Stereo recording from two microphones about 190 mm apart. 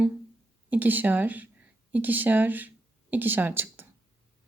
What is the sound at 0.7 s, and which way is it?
A woman's voice, 10° right (ahead or behind).